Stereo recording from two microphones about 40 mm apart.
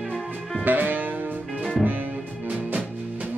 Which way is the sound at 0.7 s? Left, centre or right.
Right.